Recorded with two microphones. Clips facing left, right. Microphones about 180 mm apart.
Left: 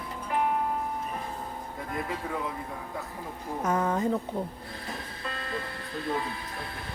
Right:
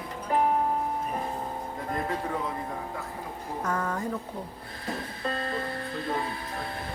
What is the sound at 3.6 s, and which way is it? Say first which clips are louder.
Speech: left 4 dB; 20° left (ahead or behind).